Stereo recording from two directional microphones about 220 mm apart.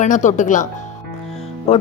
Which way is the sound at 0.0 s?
35° left (ahead or behind).